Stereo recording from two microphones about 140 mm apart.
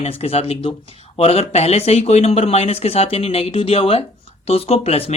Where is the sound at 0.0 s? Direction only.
45° left (ahead or behind).